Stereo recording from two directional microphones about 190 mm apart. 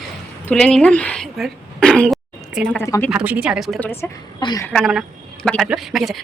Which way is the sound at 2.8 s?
15° left (ahead or behind).